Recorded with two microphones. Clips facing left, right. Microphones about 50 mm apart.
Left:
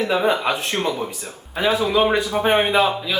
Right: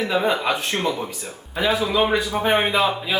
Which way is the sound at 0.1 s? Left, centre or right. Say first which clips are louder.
Left 1 dB; centre.